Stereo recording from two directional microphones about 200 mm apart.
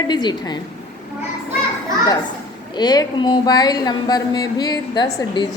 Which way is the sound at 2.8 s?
20° left (ahead or behind).